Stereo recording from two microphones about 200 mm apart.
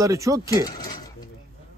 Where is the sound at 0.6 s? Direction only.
20° left (ahead or behind).